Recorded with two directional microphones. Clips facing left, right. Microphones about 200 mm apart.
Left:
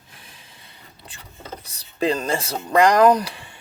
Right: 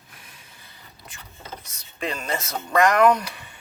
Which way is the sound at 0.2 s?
30° left (ahead or behind).